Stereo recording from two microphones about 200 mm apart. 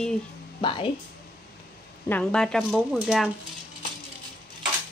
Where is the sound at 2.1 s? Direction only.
5° left (ahead or behind).